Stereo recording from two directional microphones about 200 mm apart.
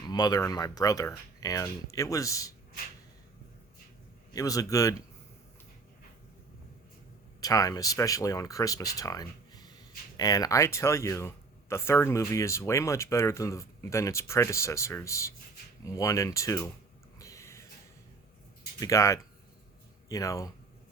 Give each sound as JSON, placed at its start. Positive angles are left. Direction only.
{"t": 0.0, "sound": "speech", "side_deg": 20}
{"t": 4.4, "sound": "speech", "side_deg": 15}
{"t": 7.4, "sound": "speech", "side_deg": 15}
{"t": 17.2, "sound": "a sound", "side_deg": 15}
{"t": 18.8, "sound": "speech", "side_deg": 15}